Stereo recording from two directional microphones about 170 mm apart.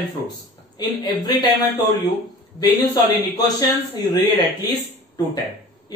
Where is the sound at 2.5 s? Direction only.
25° left (ahead or behind).